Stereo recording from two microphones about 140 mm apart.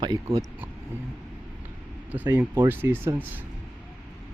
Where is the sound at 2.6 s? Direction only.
15° right (ahead or behind).